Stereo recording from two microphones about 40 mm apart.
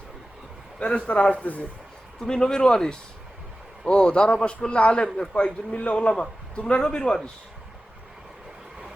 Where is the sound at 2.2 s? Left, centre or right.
Centre.